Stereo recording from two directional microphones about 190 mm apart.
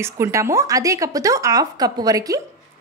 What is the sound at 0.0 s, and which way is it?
A woman's voice, 15° right (ahead or behind).